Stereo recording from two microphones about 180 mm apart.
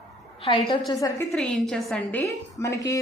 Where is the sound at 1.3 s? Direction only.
Centre (ahead or behind).